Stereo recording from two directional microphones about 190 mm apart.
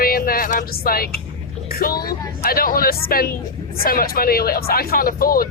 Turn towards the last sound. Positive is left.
turn(degrees=50)  # may be behind; listen again after turning